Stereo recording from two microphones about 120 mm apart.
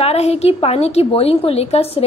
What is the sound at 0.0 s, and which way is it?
A woman's voice, 60° left (ahead or behind).